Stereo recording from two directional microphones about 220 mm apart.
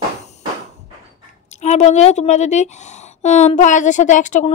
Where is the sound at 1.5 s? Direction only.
30° left (ahead or behind).